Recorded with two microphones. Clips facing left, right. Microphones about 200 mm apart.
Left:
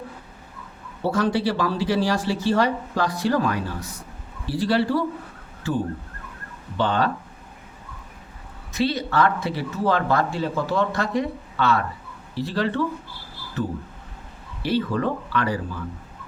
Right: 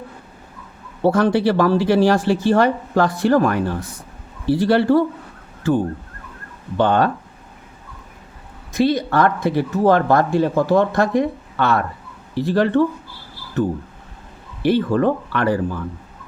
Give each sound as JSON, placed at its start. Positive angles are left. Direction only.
{"t": 1.0, "sound": "speech", "side_deg": -55}
{"t": 6.7, "sound": "speech", "side_deg": -55}
{"t": 8.7, "sound": "speech", "side_deg": -50}
{"t": 14.6, "sound": "speech", "side_deg": -50}